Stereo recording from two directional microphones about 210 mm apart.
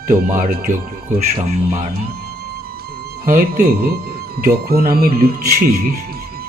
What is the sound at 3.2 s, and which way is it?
Speech, 45° right (ahead or behind).